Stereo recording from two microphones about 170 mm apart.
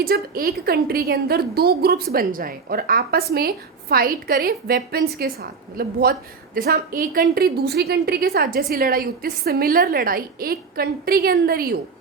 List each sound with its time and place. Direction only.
0.0 s a woman's voice: 60° right (ahead or behind)